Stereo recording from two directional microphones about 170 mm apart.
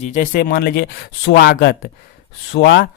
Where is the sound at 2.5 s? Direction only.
90° left.